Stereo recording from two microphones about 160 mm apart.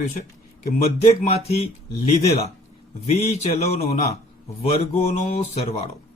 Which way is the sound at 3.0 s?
40° left (ahead or behind).